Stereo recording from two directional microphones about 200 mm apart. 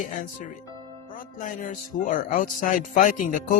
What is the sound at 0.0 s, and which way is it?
Music, 40° left (ahead or behind).